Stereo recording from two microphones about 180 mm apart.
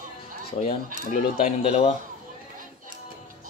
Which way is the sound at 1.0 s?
45° left (ahead or behind).